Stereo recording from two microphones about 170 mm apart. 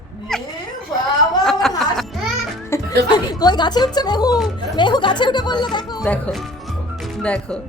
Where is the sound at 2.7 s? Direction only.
15° left (ahead or behind).